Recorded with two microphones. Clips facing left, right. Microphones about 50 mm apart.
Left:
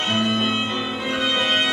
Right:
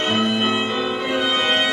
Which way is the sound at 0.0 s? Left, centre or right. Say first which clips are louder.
Right 2 dB; centre.